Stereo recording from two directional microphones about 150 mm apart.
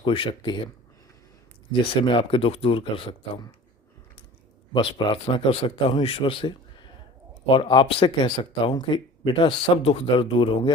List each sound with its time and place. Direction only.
0.0 s speech: 35° left (ahead or behind)
2.0 s speech: 35° left (ahead or behind)
4.7 s speech: 40° left (ahead or behind)